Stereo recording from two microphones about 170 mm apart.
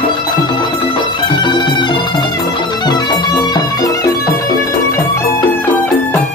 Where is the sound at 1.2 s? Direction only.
25° left (ahead or behind).